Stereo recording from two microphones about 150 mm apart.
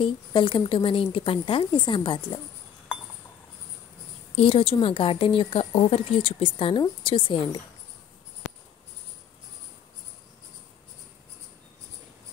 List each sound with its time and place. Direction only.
0.0 s speech: 35° left (ahead or behind)
4.4 s speech: 40° left (ahead or behind)